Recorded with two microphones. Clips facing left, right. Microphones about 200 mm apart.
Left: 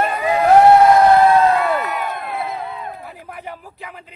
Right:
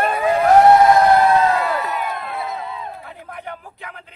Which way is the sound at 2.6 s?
60° left (ahead or behind).